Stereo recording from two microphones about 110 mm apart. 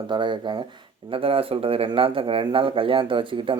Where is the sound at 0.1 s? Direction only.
45° right (ahead or behind).